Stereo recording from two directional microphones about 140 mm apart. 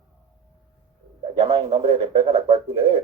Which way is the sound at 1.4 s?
25° right (ahead or behind).